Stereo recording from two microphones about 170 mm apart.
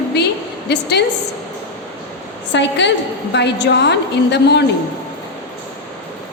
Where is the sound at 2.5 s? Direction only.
90° left.